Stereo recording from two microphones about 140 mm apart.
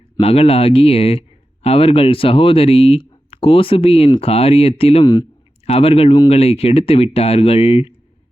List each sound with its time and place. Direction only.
0.2 s speech: 45° left (ahead or behind)